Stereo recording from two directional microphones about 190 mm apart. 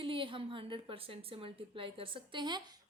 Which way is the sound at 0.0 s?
25° right (ahead or behind).